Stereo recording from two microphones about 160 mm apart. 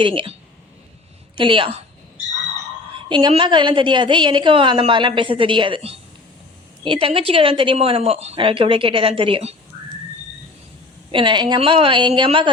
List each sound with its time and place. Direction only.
0.0 s a woman's voice: 35° right (ahead or behind)
1.4 s a woman's voice: 30° right (ahead or behind)
3.1 s a woman's voice: 25° right (ahead or behind)
11.1 s a woman's voice: 30° right (ahead or behind)